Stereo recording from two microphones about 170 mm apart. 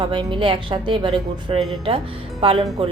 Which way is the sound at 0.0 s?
30° right (ahead or behind).